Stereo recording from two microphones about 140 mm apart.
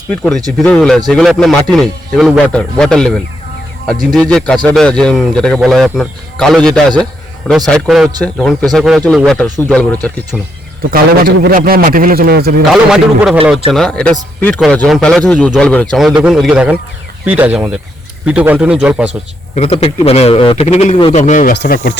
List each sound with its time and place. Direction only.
0.1 s speech: 5° left (ahead or behind)
10.9 s speech: 90° right
12.7 s a man's voice: 5° right (ahead or behind)
16.2 s speech: 5° right (ahead or behind)
19.5 s a man's voice: 45° left (ahead or behind); by 21.9 s 90° left